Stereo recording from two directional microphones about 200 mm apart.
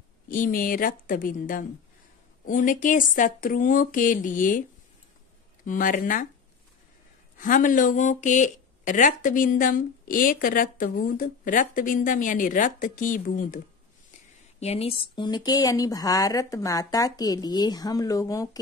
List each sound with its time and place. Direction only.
0.3 s a woman's voice: 45° left (ahead or behind)
5.7 s a woman's voice: 40° left (ahead or behind)
7.3 s speech: 40° left (ahead or behind)
14.6 s speech: 30° left (ahead or behind)